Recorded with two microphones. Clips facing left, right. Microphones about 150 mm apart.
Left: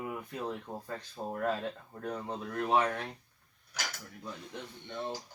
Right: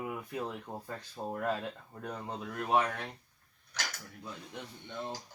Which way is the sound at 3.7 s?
5° left (ahead or behind).